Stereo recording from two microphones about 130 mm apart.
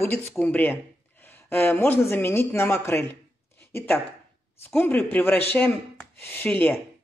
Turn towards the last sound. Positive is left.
turn(degrees=15)  # may be behind; listen again after turning